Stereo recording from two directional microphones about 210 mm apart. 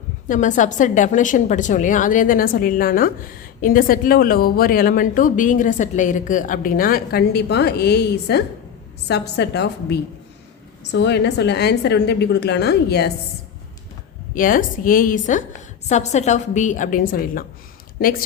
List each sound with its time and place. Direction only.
0.3 s a woman's voice: 35° left (ahead or behind)
14.3 s a woman's voice: 40° left (ahead or behind)